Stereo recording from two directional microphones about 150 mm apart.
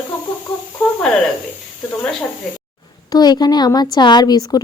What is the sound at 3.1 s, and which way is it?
A woman's voice, 25° left (ahead or behind).